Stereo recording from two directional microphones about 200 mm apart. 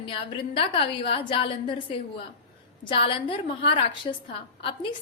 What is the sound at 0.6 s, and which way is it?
A woman's voice, 25° left (ahead or behind).